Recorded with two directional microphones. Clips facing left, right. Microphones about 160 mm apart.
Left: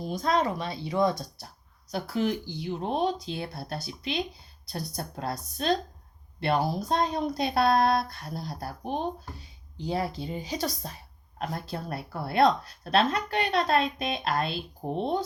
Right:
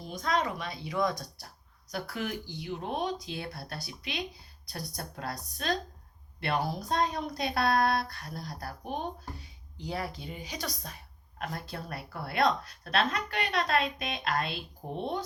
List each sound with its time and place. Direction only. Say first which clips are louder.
0.0 s speech: left 4 dB; 30° left (ahead or behind)